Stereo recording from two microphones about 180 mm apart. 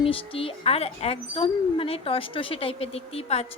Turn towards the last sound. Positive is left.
turn(degrees=35)  # may be behind; listen again after turning